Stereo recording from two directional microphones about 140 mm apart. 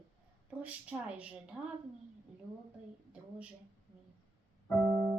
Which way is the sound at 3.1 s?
10° right (ahead or behind).